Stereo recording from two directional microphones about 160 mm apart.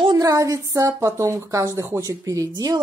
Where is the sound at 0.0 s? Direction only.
25° right (ahead or behind).